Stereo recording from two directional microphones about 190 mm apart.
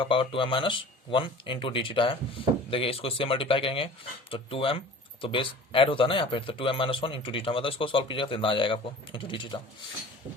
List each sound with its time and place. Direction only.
0.0 s speech: 25° left (ahead or behind)